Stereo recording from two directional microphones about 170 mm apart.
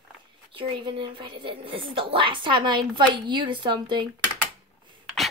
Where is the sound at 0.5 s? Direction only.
30° right (ahead or behind).